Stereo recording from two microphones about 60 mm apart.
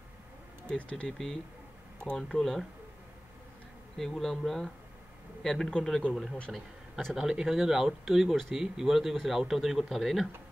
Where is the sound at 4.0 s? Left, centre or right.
Centre.